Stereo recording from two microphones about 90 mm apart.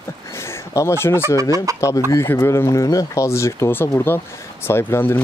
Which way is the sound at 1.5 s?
40° right (ahead or behind).